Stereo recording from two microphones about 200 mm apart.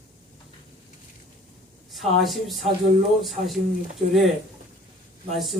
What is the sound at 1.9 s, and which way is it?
Speech, centre (ahead or behind).